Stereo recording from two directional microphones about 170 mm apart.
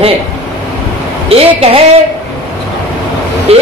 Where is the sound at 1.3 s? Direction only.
35° right (ahead or behind).